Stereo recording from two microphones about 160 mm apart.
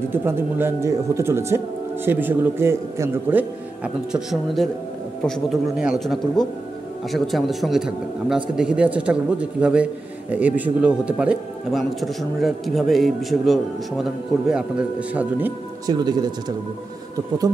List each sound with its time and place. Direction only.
0.1 s a man's voice: 15° right (ahead or behind)
15.9 s speech: 25° right (ahead or behind)